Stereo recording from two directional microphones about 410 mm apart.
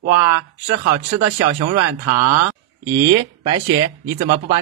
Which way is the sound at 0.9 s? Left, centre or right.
Right.